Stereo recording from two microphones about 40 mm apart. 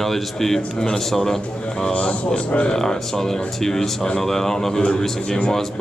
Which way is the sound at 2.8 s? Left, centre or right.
Centre.